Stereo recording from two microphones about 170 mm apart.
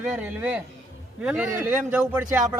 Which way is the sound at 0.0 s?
10° right (ahead or behind).